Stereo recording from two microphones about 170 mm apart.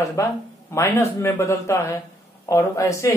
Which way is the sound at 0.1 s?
15° left (ahead or behind).